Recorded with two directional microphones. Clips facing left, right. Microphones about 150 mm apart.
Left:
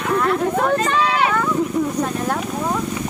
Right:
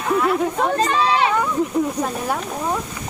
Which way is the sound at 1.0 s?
30° right (ahead or behind).